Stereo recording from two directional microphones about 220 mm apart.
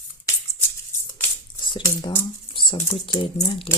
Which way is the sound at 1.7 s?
20° left (ahead or behind).